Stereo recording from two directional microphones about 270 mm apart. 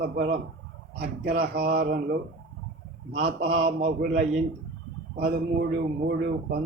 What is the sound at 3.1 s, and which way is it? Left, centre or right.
Speech, right.